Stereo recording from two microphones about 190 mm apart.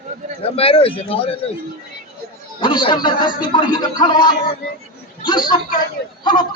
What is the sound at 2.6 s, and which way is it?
Speech, 25° left (ahead or behind).